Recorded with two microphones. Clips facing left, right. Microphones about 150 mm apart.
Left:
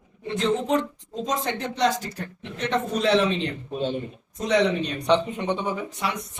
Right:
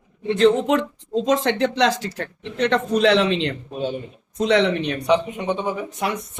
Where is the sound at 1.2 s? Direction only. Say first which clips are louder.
Right 8 dB; 90° right.